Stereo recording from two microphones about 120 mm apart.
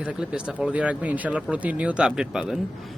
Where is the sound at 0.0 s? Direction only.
10° right (ahead or behind).